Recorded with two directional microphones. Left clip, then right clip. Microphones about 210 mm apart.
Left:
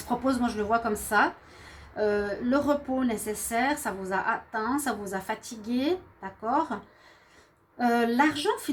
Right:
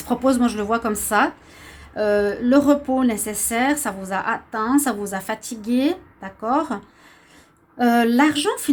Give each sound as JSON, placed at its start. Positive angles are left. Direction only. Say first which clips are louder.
{"t": 0.3, "sound": "a woman's voice", "louder": "right 7 dB", "side_deg": -45}
{"t": 7.8, "sound": "a woman's voice", "louder": "right 7 dB", "side_deg": -45}